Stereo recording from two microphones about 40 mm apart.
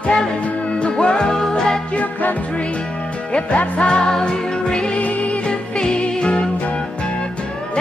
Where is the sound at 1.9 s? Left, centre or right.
Left.